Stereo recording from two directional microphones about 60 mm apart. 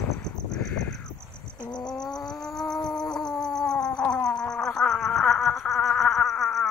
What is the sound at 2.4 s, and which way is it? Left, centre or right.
Cat, centre.